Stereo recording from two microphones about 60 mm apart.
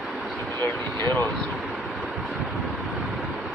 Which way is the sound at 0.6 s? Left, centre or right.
Left.